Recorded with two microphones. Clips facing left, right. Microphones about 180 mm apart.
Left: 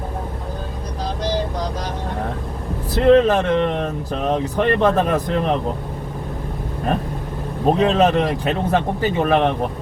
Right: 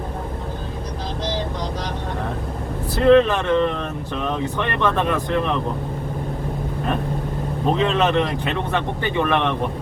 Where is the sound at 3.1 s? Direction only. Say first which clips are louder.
Left 1 dB; 40° left (ahead or behind).